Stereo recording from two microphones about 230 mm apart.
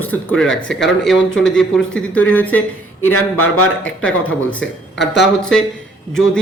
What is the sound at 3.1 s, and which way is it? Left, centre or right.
Speech, left.